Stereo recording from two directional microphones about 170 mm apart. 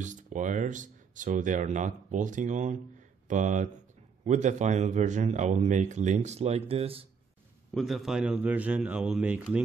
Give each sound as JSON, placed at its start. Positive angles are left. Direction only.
{"t": 0.0, "sound": "speech", "side_deg": -45}
{"t": 7.7, "sound": "speech", "side_deg": 0}